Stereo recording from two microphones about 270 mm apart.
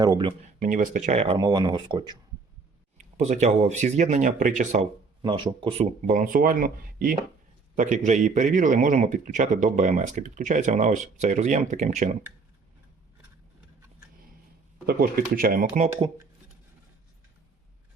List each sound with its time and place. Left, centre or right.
0.0 s speech: centre
0.6 s speech: right
14.8 s speech: right